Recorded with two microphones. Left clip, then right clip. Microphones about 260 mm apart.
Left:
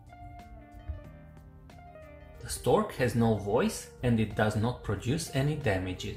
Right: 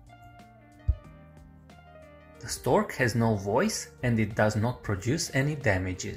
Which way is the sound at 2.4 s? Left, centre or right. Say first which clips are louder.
Right 1 dB; right.